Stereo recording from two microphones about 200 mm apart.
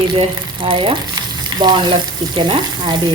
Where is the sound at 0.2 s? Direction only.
25° right (ahead or behind).